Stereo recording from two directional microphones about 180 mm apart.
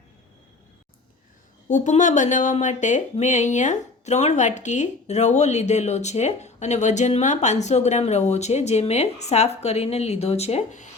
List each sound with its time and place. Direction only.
1.6 s speech: 40° left (ahead or behind)